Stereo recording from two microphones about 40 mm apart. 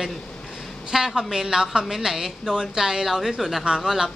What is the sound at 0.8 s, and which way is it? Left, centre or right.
A woman's voice, centre.